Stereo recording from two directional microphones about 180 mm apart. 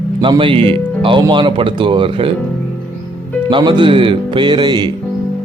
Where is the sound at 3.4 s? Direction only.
25° right (ahead or behind).